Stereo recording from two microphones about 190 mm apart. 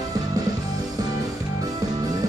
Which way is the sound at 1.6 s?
20° right (ahead or behind).